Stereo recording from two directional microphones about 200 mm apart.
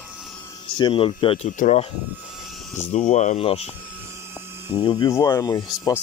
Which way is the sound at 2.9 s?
35° left (ahead or behind).